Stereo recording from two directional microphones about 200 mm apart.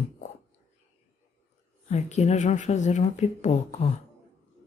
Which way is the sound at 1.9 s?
35° left (ahead or behind).